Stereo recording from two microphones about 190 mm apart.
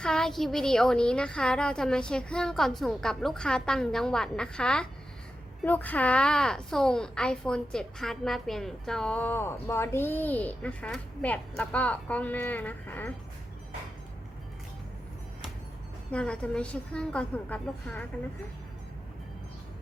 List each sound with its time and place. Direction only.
0.0 s a woman's voice: 5° left (ahead or behind)
16.1 s a woman's voice: 5° left (ahead or behind)